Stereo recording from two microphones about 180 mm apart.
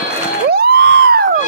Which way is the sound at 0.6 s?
65° right (ahead or behind).